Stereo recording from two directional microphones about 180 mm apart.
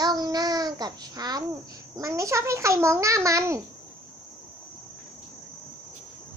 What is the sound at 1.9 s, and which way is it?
A child's voice, 15° right (ahead or behind).